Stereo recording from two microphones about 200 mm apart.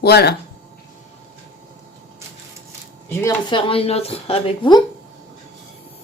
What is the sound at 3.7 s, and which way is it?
Speech, 30° left (ahead or behind).